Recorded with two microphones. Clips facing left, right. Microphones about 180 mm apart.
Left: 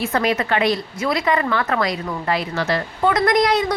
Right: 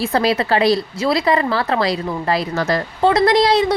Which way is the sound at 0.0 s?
35° right (ahead or behind).